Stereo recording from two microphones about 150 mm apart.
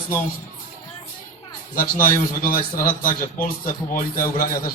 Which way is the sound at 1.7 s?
65° left (ahead or behind).